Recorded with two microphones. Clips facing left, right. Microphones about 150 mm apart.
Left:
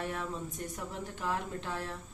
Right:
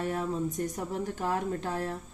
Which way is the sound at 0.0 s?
40° right (ahead or behind).